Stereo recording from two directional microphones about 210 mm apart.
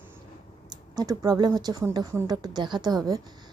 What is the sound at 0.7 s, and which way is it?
A woman's voice, 20° right (ahead or behind).